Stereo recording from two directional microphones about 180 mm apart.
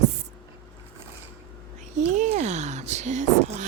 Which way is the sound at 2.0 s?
40° right (ahead or behind).